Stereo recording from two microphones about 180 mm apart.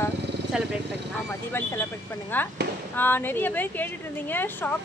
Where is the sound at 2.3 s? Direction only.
10° left (ahead or behind).